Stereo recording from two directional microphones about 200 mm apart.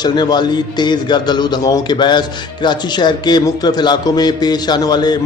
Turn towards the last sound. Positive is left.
turn(degrees=20)  # may be behind; listen again after turning